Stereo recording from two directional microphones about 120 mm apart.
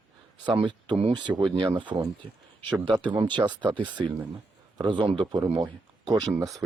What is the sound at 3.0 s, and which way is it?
Speech, 40° right (ahead or behind).